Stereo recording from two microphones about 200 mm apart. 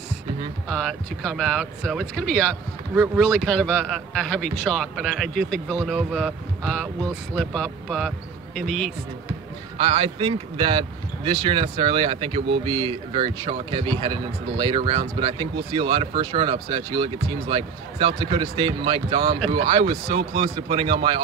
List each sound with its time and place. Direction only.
0.7 s a man's voice: 5° left (ahead or behind)
9.8 s speech: 25° right (ahead or behind)